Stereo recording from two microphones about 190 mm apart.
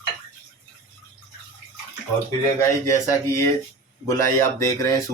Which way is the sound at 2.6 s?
15° left (ahead or behind).